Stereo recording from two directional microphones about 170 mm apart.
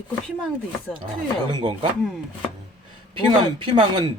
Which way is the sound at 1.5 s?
30° right (ahead or behind).